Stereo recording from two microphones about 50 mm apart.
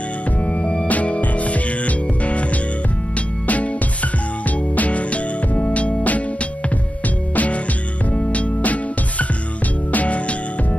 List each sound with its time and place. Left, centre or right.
0.5 s music: left
4.7 s music: left
7.3 s music: left
9.9 s music: left